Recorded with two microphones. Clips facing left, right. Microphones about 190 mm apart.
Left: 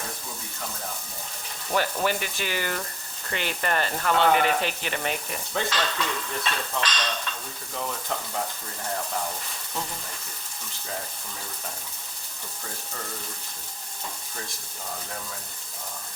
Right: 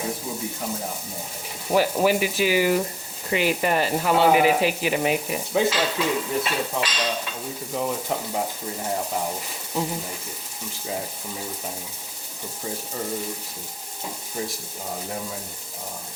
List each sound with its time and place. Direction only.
0.0 s speech: 15° right (ahead or behind)
12.6 s speech: 15° right (ahead or behind)
14.8 s speech: 20° right (ahead or behind)